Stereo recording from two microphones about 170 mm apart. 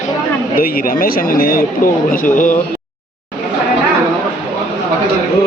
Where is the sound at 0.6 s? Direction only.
60° left (ahead or behind).